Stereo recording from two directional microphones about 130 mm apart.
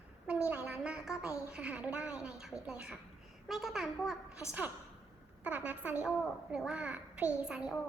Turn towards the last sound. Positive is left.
turn(degrees=-5)  # may be behind; listen again after turning